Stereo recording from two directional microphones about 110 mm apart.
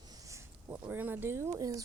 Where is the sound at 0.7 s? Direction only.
15° right (ahead or behind); by 1.8 s 30° right (ahead or behind).